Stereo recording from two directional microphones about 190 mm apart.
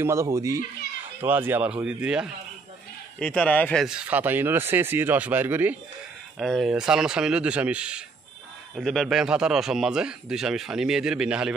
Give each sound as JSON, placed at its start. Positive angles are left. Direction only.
{"t": 0.0, "sound": "speech", "side_deg": -15}
{"t": 3.2, "sound": "speech", "side_deg": 5}